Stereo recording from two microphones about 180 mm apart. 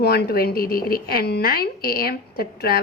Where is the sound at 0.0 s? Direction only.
60° left (ahead or behind).